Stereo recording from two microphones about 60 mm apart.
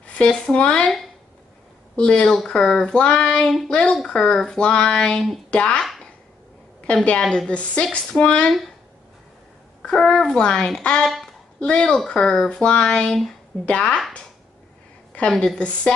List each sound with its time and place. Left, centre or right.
0.0 s speech: centre
2.0 s speech: centre
7.1 s speech: centre
9.8 s speech: centre
13.7 s speech: centre
15.3 s speech: centre